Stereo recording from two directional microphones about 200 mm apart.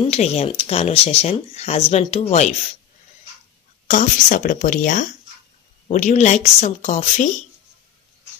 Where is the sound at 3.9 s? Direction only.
40° left (ahead or behind).